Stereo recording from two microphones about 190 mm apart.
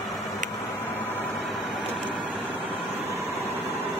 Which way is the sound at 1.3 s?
Centre (ahead or behind).